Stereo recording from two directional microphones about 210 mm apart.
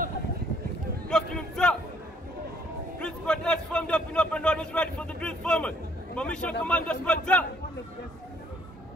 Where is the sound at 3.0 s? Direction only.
5° left (ahead or behind).